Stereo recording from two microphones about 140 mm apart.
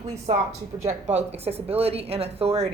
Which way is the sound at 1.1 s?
50° right (ahead or behind).